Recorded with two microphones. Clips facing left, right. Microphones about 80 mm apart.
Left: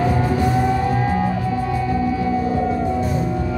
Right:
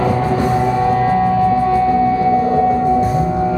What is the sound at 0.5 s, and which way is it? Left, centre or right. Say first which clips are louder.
Music: right 4 dB; right.